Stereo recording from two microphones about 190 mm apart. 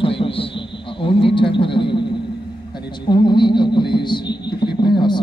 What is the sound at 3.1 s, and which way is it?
Music, 25° left (ahead or behind).